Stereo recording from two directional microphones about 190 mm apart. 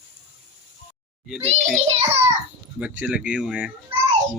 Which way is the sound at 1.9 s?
30° right (ahead or behind).